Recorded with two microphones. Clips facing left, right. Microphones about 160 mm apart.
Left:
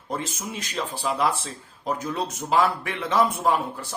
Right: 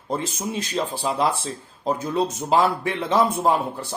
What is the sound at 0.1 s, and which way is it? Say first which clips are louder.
Speech: right 4 dB; 30° right (ahead or behind).